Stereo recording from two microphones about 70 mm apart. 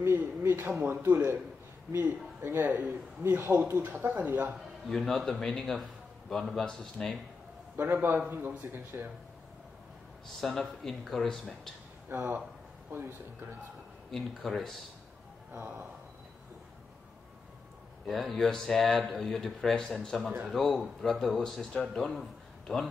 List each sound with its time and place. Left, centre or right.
0.0 s speech: right
2.4 s a man's voice: right
4.5 s a man's voice: centre
7.7 s a man's voice: right
10.2 s speech: centre
12.1 s a man's voice: right
14.1 s speech: centre
18.0 s a man's voice: centre